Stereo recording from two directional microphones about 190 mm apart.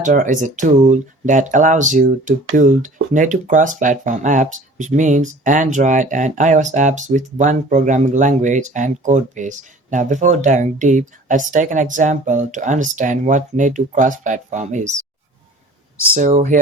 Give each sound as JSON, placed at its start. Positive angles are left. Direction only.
{"t": 0.0, "sound": "speech", "side_deg": -45}
{"t": 16.1, "sound": "speech", "side_deg": -40}